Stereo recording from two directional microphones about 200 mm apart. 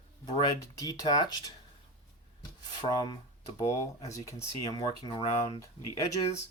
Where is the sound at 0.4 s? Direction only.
20° left (ahead or behind).